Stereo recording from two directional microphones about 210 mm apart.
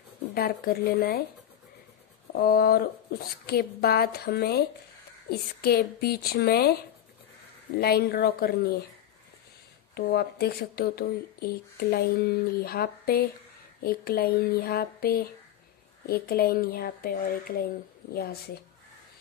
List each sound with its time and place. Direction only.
0.3 s speech: 45° left (ahead or behind)
2.3 s speech: 45° left (ahead or behind)
7.8 s speech: 45° left (ahead or behind)
9.9 s speech: 50° left (ahead or behind)